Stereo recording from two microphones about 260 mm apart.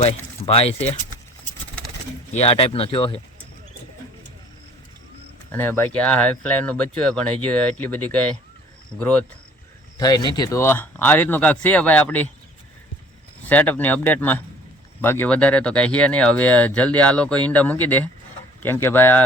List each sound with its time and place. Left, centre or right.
0.0 s speech: left
2.3 s speech: left
5.5 s speech: centre
13.4 s speech: centre